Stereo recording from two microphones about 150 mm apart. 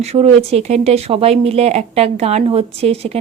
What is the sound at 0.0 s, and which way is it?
Speech, 45° right (ahead or behind).